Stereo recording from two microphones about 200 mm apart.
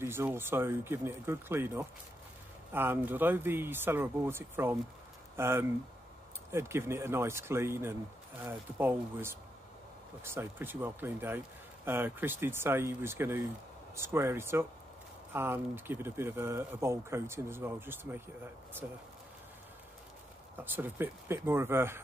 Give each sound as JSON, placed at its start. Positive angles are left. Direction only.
{"t": 0.0, "sound": "speech", "side_deg": -10}
{"t": 20.5, "sound": "speech", "side_deg": -10}